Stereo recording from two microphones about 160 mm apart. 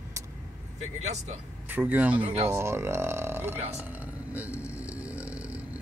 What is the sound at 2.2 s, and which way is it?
Speech, 40° right (ahead or behind).